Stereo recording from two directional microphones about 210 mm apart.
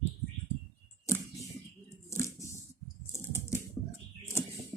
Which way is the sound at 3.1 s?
10° left (ahead or behind).